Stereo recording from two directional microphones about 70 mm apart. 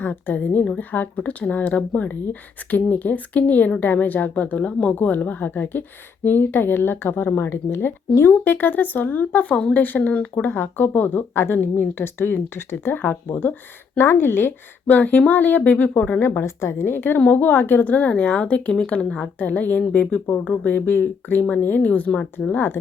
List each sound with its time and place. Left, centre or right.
0.0 s a woman's voice: left
16.2 s a woman's voice: left